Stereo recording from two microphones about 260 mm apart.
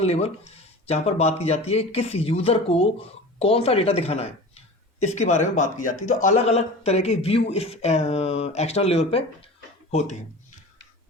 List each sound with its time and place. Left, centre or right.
0.0 s speech: left